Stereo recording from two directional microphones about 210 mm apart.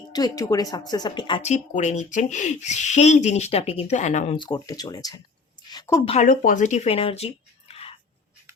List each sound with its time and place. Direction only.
0.1 s a woman's voice: 15° left (ahead or behind)
1.4 s speech: 35° left (ahead or behind)
4.4 s speech: 20° left (ahead or behind)
5.7 s a sound: 15° left (ahead or behind)
6.1 s speech: 35° left (ahead or behind)